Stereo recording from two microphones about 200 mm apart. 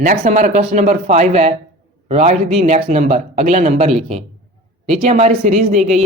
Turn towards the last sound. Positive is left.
turn(degrees=-35)  # may be behind; listen again after turning